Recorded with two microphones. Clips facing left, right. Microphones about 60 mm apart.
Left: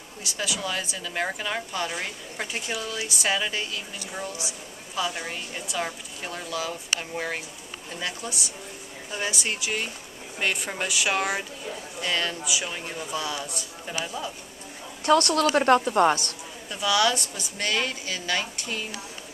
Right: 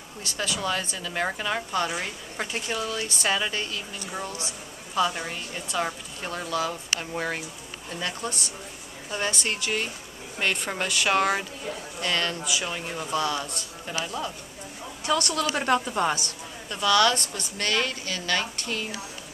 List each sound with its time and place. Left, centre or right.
0.2 s a woman's voice: centre
2.4 s a woman's voice: centre
15.0 s a woman's voice: left
15.5 s a woman's voice: left
16.8 s a woman's voice: centre